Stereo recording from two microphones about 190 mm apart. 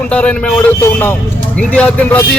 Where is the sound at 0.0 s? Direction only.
5° left (ahead or behind).